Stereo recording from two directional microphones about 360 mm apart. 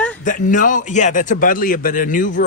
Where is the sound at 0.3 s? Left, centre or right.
Left.